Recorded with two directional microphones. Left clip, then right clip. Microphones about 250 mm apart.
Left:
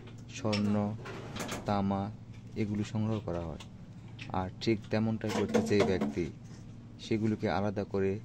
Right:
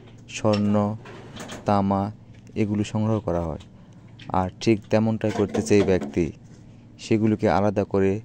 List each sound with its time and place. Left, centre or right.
0.3 s speech: right